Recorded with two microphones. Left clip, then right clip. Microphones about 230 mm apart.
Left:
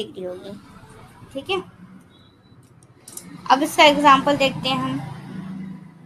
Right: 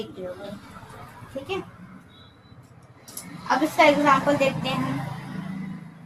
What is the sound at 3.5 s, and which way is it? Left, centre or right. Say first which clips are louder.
A woman's voice: left 4 dB; left.